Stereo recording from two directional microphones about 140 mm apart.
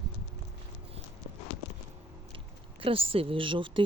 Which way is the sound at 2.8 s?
40° right (ahead or behind).